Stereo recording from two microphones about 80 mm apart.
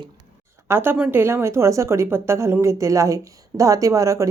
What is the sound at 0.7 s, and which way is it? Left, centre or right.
A woman's voice, right.